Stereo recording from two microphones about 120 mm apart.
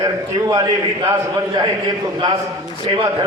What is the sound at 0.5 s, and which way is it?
Speech, 30° right (ahead or behind).